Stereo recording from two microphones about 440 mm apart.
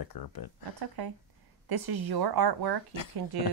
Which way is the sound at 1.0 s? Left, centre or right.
Right.